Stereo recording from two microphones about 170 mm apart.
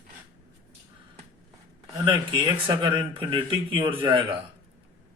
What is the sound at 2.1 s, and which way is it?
Speech, 25° right (ahead or behind).